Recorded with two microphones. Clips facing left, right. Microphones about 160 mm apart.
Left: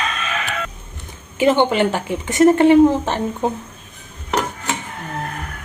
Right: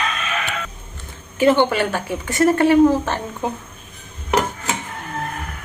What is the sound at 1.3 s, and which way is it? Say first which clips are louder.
A woman's voice: even; 20° left (ahead or behind).